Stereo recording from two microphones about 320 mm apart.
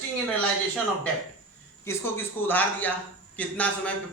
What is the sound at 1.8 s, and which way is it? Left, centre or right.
A man's voice, centre.